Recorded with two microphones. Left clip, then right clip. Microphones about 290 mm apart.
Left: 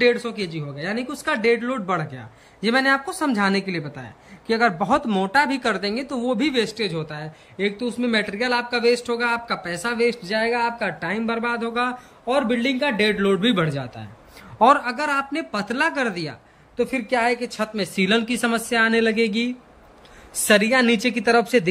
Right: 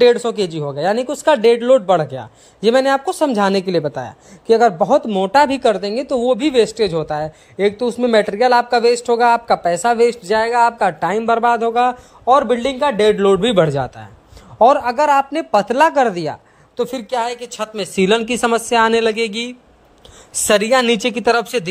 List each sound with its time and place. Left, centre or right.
0.3 s speech: centre
14.6 s speech: centre
16.7 s speech: right